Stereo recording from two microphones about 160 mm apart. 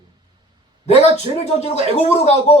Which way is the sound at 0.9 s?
45° left (ahead or behind).